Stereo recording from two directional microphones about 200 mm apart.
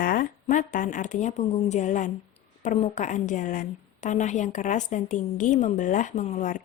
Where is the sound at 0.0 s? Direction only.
45° left (ahead or behind).